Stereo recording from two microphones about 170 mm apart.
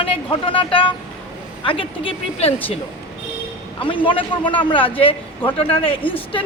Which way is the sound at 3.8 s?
30° left (ahead or behind).